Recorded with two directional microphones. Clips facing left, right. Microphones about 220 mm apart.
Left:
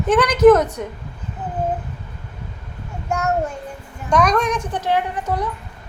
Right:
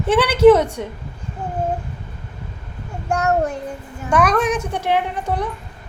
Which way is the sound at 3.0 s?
35° right (ahead or behind).